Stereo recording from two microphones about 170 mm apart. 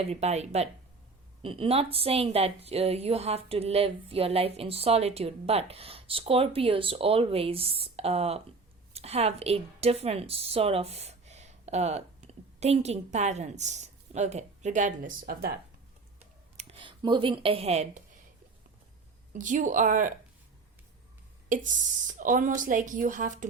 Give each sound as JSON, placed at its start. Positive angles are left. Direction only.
{"t": 0.0, "sound": "a woman's voice", "side_deg": -40}
{"t": 16.6, "sound": "speech", "side_deg": -30}
{"t": 19.3, "sound": "a woman's voice", "side_deg": -50}
{"t": 21.5, "sound": "a woman's voice", "side_deg": -50}